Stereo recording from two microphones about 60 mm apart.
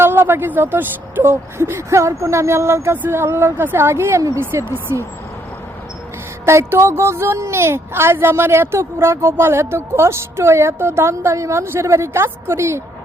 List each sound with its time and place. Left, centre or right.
0.0 s a woman's voice: right
1.2 s a woman's voice: right
6.4 s a woman's voice: right